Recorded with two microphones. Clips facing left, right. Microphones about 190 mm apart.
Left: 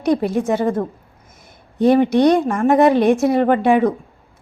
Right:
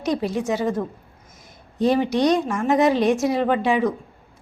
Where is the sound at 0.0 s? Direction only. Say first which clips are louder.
Left 5 dB; 55° left (ahead or behind).